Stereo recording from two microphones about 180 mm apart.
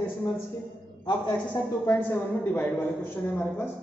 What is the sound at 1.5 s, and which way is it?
A woman's voice, 10° left (ahead or behind).